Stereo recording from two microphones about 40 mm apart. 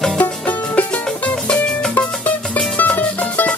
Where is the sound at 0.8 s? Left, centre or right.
Left.